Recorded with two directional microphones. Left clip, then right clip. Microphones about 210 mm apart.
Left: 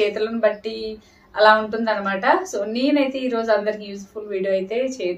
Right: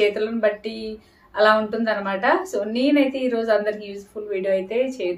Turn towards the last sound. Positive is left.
turn(degrees=-5)  # may be behind; listen again after turning